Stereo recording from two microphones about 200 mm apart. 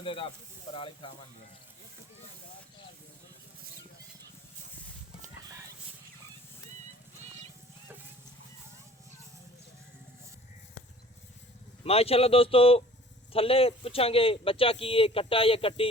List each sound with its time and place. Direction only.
0.0 s speech: 25° left (ahead or behind)
11.8 s speech: 30° left (ahead or behind)